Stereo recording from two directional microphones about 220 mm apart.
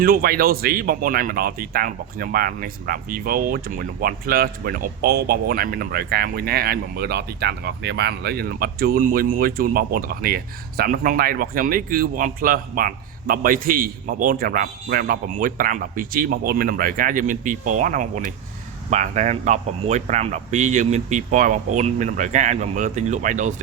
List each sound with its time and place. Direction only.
0.0 s speech: 40° right (ahead or behind)